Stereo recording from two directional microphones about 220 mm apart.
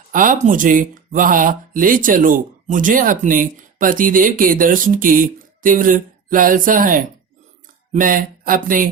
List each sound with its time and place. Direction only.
0.1 s speech: 35° right (ahead or behind)